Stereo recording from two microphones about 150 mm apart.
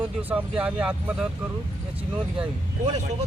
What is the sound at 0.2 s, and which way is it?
Speech, 10° right (ahead or behind).